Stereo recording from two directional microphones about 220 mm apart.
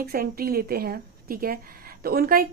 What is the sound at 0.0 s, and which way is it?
A woman's voice, 40° right (ahead or behind).